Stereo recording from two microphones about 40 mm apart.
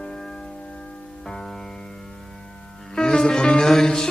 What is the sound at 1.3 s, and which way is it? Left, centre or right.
Music, centre.